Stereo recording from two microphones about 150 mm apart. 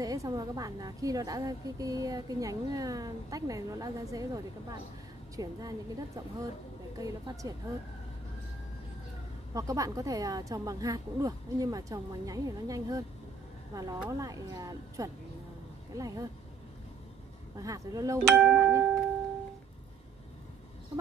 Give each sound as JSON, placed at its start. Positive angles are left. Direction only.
{"t": 0.0, "sound": "a woman's voice", "side_deg": -25}
{"t": 9.5, "sound": "a woman's voice", "side_deg": -25}
{"t": 17.6, "sound": "a woman's voice", "side_deg": -25}
{"t": 18.2, "sound": "speech", "side_deg": 0}
{"t": 18.6, "sound": "music", "side_deg": -20}